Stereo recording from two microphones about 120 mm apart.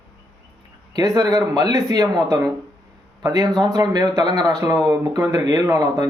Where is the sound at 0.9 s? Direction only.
30° right (ahead or behind).